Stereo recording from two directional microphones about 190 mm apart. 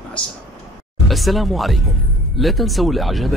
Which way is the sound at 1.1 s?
Centre (ahead or behind).